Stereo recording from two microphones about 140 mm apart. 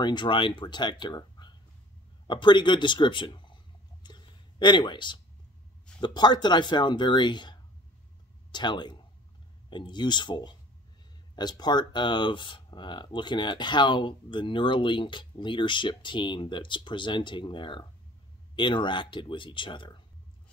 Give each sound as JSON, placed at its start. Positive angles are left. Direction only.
{"t": 0.0, "sound": "speech", "side_deg": 35}
{"t": 4.0, "sound": "a sound", "side_deg": 35}
{"t": 5.9, "sound": "speech", "side_deg": 30}